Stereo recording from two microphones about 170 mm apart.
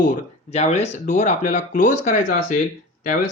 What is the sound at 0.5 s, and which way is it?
Speech, 40° left (ahead or behind).